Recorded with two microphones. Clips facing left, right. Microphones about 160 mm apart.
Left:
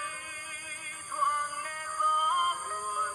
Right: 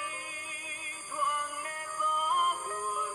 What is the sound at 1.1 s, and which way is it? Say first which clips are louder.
Music: left 1 dB; 20° right (ahead or behind).